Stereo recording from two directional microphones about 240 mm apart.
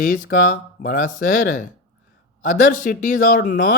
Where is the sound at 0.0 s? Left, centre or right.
Left.